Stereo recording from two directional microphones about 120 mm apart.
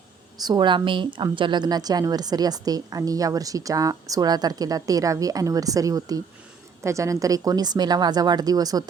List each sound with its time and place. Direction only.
0.4 s a woman's voice: 40° right (ahead or behind)